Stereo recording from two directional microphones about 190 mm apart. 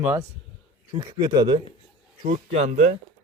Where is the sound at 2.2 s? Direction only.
40° right (ahead or behind).